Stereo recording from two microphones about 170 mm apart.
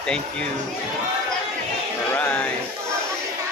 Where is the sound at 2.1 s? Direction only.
10° left (ahead or behind).